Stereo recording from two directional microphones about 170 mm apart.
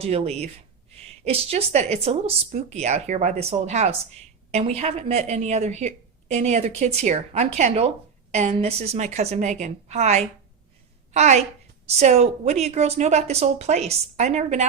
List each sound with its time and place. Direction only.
0.0 s speech: 40° right (ahead or behind)